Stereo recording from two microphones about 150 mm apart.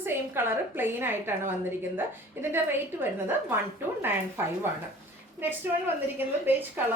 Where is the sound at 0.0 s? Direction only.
15° right (ahead or behind).